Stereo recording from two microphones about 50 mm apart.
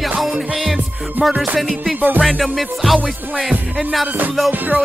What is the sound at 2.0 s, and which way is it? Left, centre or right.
Music, right.